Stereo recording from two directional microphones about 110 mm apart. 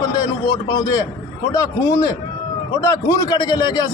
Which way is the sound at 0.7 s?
35° left (ahead or behind).